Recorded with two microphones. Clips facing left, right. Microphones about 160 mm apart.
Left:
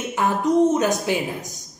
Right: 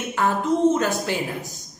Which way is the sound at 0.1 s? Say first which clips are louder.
Left 2 dB; 15° left (ahead or behind).